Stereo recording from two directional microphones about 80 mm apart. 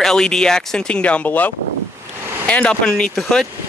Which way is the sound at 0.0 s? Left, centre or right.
Centre.